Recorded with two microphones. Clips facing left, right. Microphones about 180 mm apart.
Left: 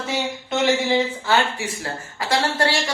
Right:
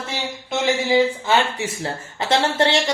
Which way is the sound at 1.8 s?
25° right (ahead or behind).